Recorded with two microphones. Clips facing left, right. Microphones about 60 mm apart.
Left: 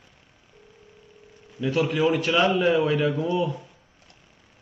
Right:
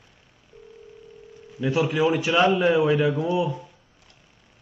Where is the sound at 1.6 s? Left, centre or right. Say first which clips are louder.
Right 1 dB; centre.